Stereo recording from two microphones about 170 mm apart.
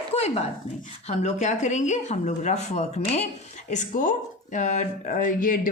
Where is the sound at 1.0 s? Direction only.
40° left (ahead or behind).